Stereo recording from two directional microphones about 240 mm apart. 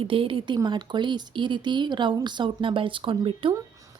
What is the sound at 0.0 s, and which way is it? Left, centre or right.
Speech, right.